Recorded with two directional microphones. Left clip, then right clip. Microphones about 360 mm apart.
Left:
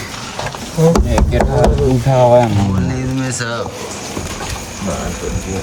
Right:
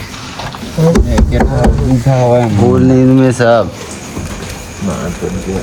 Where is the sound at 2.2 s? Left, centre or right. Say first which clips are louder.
Left 2 dB; centre.